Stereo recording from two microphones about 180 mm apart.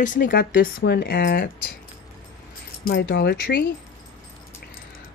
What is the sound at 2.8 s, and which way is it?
Speech, 80° left.